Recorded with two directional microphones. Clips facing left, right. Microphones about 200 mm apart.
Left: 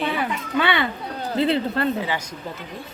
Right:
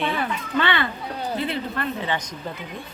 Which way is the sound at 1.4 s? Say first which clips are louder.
Left 6 dB; 30° left (ahead or behind).